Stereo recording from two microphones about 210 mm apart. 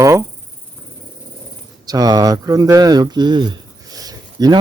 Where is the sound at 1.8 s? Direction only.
20° right (ahead or behind).